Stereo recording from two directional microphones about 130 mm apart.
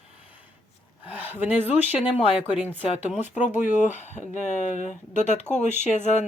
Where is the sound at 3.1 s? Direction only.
65° left (ahead or behind).